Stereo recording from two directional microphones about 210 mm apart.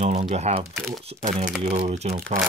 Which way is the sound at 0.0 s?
30° right (ahead or behind).